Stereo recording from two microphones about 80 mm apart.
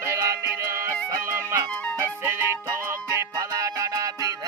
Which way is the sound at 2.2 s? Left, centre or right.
Right.